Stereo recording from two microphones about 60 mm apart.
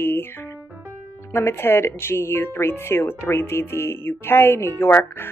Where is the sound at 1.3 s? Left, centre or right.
Left.